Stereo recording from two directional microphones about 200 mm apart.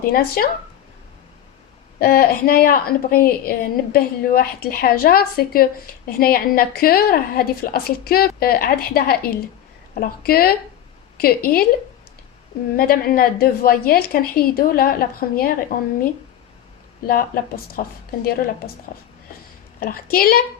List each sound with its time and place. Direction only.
0.0 s a woman's voice: 50° left (ahead or behind)
2.0 s a woman's voice: 45° left (ahead or behind)
12.7 s a woman's voice: 45° left (ahead or behind)
17.1 s a woman's voice: 45° left (ahead or behind)
19.8 s a woman's voice: 45° left (ahead or behind)